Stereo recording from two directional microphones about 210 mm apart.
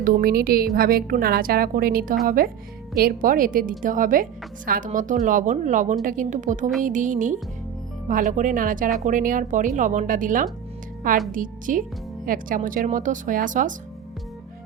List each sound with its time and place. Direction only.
0.0 s a woman's voice: 40° right (ahead or behind)